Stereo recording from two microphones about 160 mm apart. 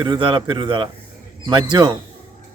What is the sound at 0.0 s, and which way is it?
A man's voice, 30° right (ahead or behind).